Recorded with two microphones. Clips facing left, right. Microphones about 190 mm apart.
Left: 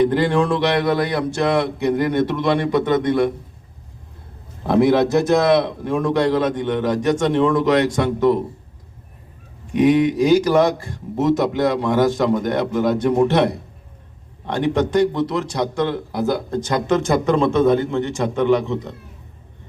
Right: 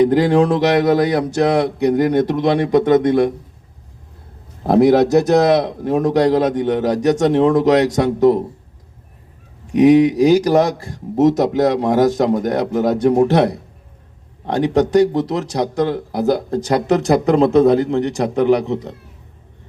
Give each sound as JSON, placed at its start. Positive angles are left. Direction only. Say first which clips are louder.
{"t": 0.1, "sound": "speech", "louder": "right 4 dB", "side_deg": -40}
{"t": 4.6, "sound": "speech", "louder": "right 3 dB", "side_deg": -40}
{"t": 9.7, "sound": "speech", "louder": "right 4 dB", "side_deg": -40}